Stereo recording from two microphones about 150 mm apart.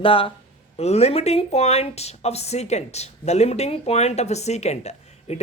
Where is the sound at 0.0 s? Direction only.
35° left (ahead or behind).